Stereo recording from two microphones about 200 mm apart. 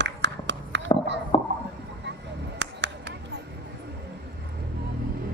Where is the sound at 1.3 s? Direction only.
25° left (ahead or behind).